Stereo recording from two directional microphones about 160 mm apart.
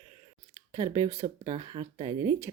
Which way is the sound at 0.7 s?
20° right (ahead or behind).